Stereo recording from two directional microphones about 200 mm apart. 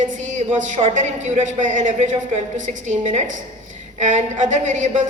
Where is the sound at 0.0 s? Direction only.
40° right (ahead or behind).